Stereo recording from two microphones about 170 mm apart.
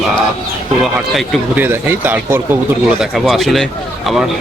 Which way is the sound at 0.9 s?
Centre (ahead or behind).